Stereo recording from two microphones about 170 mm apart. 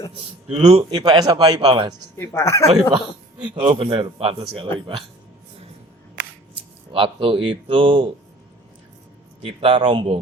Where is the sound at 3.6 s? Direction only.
35° right (ahead or behind).